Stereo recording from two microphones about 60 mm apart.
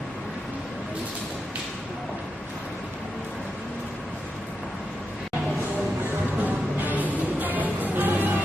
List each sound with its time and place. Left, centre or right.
6.4 s music: right